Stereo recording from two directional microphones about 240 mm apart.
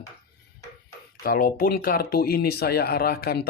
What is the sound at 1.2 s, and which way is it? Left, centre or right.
Speech, left.